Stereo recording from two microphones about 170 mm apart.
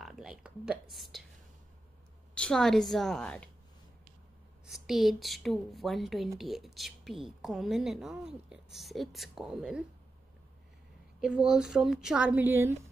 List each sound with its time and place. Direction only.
0.0 s speech: 5° right (ahead or behind)
2.3 s a woman's voice: 5° left (ahead or behind)
4.6 s a woman's voice: centre (ahead or behind)
11.1 s a woman's voice: 5° right (ahead or behind)